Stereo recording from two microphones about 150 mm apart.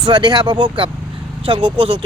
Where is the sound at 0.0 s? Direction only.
30° right (ahead or behind).